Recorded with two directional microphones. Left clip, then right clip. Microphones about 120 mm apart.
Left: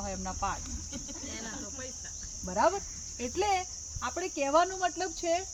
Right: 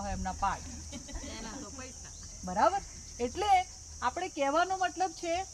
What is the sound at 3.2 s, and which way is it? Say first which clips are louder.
Speech: right 3 dB; 15° right (ahead or behind).